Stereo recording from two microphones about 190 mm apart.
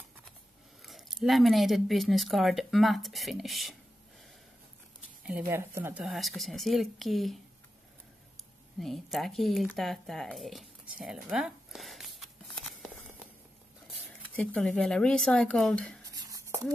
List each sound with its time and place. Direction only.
0.8 s speech: centre (ahead or behind)
5.5 s speech: 15° right (ahead or behind)
6.0 s speech: centre (ahead or behind)
8.7 s speech: centre (ahead or behind)
11.2 s a sound: 5° right (ahead or behind)
13.8 s speech: centre (ahead or behind)
16.2 s a sound: 20° right (ahead or behind)